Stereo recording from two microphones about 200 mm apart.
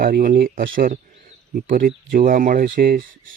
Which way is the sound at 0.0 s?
45° right (ahead or behind).